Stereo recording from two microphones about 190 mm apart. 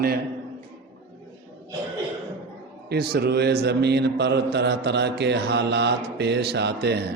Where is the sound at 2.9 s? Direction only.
60° right (ahead or behind).